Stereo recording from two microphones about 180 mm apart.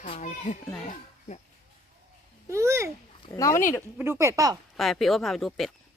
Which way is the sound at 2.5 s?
15° right (ahead or behind).